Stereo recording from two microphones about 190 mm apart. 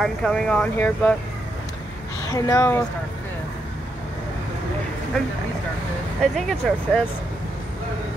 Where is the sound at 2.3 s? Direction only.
15° left (ahead or behind).